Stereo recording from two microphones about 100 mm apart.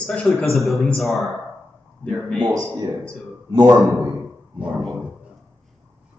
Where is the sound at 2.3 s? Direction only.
45° right (ahead or behind).